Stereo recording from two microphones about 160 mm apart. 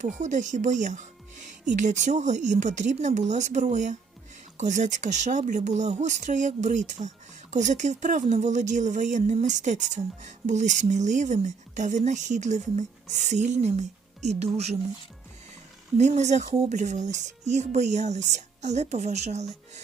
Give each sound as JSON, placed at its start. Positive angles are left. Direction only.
{"t": 0.0, "sound": "speech", "side_deg": -50}
{"t": 16.0, "sound": "speech", "side_deg": -45}